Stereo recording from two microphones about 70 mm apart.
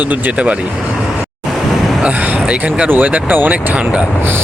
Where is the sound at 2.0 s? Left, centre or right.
Centre.